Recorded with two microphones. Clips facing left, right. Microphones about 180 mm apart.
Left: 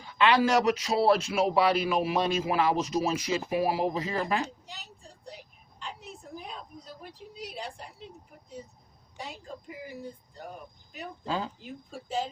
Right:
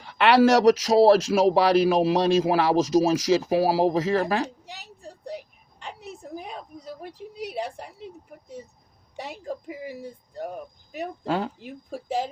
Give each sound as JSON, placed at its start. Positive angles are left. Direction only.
{"t": 0.0, "sound": "speech", "side_deg": -80}
{"t": 5.8, "sound": "a sound", "side_deg": -65}
{"t": 7.0, "sound": "a woman's voice", "side_deg": -65}
{"t": 9.1, "sound": "a woman's voice", "side_deg": -65}
{"t": 10.9, "sound": "a woman's voice", "side_deg": -65}